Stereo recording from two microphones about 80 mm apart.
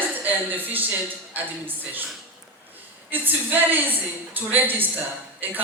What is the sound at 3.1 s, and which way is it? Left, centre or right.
A woman's voice, right.